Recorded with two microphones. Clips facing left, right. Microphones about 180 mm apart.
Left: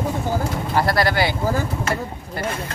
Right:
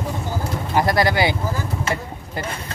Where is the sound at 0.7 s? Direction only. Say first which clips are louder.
Right 1 dB; 15° right (ahead or behind).